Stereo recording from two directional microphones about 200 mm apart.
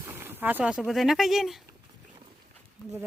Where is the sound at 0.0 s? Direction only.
10° right (ahead or behind).